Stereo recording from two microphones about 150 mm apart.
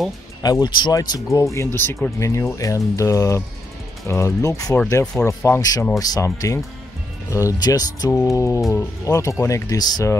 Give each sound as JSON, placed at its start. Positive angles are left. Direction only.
{"t": 0.4, "sound": "speech", "side_deg": 25}